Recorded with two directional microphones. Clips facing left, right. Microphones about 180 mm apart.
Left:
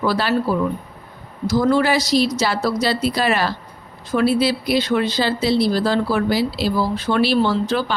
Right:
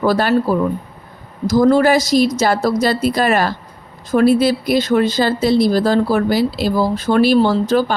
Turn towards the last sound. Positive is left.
turn(degrees=-45)  # may be behind; listen again after turning